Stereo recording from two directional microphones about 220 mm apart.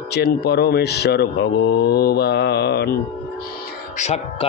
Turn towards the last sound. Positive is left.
turn(degrees=30)  # may be behind; listen again after turning